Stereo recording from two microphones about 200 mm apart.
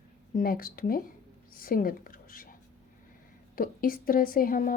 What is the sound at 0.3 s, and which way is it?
Speech, 45° left (ahead or behind).